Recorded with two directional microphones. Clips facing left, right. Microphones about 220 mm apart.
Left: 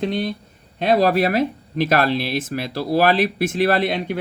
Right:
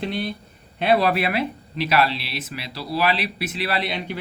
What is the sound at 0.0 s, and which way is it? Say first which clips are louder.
Speech: left 4 dB; 45° left (ahead or behind).